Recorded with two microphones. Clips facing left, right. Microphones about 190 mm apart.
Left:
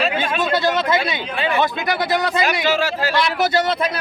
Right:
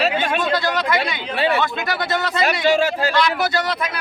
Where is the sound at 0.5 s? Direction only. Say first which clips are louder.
Left 2 dB; 20° left (ahead or behind).